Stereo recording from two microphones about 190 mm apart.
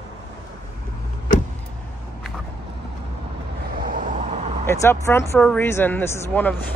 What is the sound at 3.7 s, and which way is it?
Vehicle, 45° right (ahead or behind).